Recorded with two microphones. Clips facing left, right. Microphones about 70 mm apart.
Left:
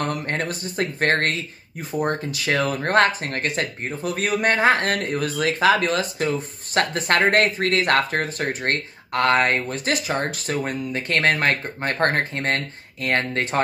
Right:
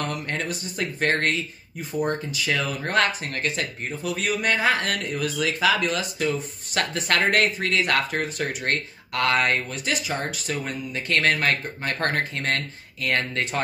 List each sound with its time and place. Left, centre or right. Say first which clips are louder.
0.0 s speech: left 3 dB; left